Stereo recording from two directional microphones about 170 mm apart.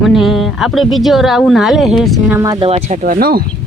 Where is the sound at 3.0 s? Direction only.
60° right (ahead or behind).